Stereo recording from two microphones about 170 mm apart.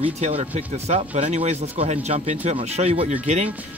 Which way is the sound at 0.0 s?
40° right (ahead or behind).